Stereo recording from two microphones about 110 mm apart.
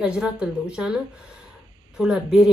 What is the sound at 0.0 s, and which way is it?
A woman's voice, 10° right (ahead or behind).